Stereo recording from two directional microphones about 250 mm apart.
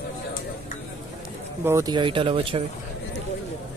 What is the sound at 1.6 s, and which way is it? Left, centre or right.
Speech, centre.